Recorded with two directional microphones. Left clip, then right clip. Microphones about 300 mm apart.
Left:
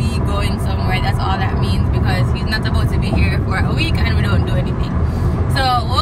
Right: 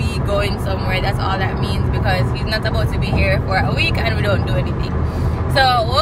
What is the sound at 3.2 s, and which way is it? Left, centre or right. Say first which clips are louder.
Speech: right 8 dB; centre.